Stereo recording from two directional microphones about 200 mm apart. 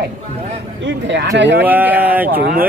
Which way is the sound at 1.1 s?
60° right (ahead or behind).